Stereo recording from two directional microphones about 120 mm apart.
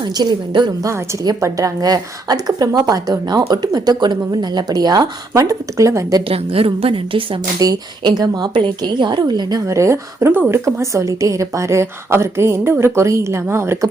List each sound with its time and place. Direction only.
0.0 s a woman's voice: 35° right (ahead or behind)
6.2 s a woman's voice: 50° right (ahead or behind)
7.6 s a woman's voice: 35° right (ahead or behind)